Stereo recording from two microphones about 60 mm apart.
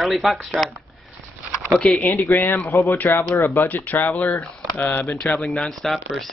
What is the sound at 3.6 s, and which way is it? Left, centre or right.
Speech, left.